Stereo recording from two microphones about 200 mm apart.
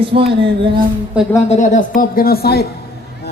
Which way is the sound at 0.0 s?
25° right (ahead or behind).